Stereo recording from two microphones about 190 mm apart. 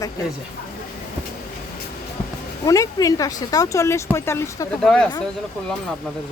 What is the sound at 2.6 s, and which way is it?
Speech, 20° left (ahead or behind).